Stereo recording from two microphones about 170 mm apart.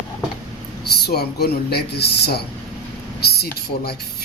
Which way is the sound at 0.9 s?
70° left (ahead or behind).